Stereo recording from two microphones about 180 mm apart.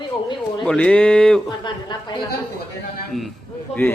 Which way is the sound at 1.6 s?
25° left (ahead or behind).